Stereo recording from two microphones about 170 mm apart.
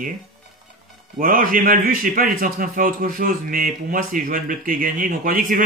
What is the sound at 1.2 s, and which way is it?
A man's voice, 55° right (ahead or behind).